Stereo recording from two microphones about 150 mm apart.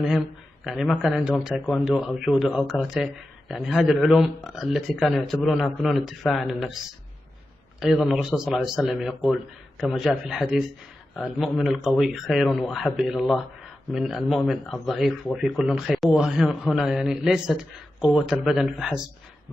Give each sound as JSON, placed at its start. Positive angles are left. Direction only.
{"t": 0.7, "sound": "speech", "side_deg": 0}
{"t": 7.8, "sound": "speech", "side_deg": 0}